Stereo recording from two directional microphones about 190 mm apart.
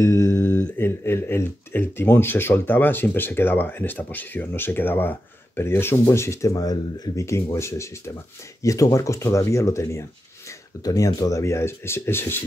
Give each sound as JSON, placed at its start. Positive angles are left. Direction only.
{"t": 0.0, "sound": "speech", "side_deg": 15}